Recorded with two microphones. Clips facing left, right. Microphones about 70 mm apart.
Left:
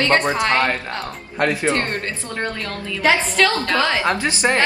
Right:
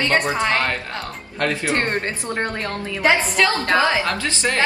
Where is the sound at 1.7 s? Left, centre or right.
Right.